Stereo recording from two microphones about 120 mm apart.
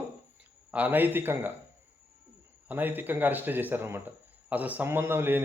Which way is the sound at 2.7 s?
15° right (ahead or behind).